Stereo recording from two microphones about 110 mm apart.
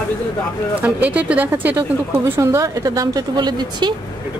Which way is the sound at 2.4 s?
30° right (ahead or behind).